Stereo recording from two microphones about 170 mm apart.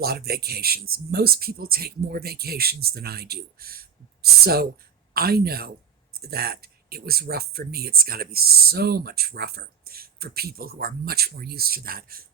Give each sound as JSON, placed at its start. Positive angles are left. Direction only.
{"t": 0.0, "sound": "speech", "side_deg": -65}